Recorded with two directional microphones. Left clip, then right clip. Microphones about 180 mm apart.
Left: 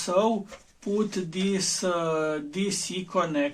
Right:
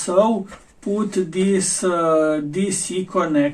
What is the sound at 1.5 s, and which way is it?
Speech, 25° left (ahead or behind).